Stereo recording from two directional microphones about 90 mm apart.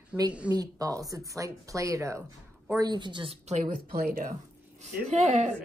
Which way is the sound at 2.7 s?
55° right (ahead or behind).